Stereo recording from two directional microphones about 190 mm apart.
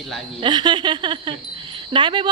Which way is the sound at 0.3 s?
25° right (ahead or behind).